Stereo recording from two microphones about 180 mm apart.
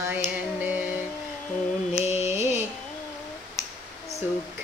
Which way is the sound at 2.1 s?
35° left (ahead or behind).